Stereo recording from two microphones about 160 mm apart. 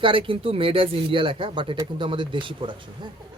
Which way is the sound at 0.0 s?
35° right (ahead or behind).